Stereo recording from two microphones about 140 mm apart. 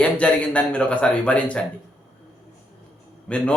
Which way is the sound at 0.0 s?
10° left (ahead or behind).